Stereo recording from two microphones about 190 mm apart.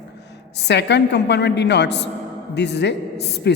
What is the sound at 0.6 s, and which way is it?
A woman's voice, 65° left (ahead or behind).